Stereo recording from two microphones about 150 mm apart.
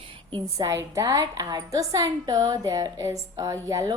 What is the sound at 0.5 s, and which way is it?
A woman's voice, 20° right (ahead or behind).